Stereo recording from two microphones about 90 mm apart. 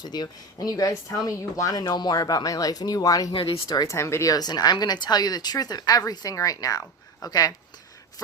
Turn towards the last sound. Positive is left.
turn(degrees=40)  # may be behind; listen again after turning